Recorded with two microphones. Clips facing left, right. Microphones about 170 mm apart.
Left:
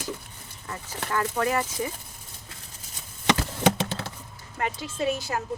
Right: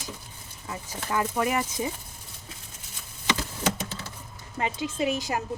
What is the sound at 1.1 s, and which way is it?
Speech, 15° right (ahead or behind).